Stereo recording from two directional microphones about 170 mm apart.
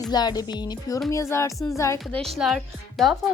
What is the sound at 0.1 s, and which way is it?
Speech, 25° left (ahead or behind).